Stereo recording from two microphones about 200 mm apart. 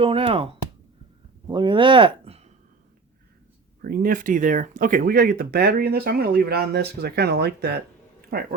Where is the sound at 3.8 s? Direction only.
45° right (ahead or behind).